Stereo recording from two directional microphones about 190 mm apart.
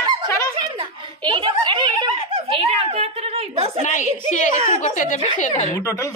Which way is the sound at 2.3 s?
30° right (ahead or behind).